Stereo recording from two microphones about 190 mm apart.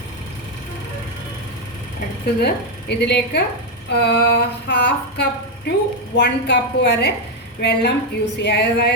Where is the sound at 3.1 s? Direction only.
60° left (ahead or behind).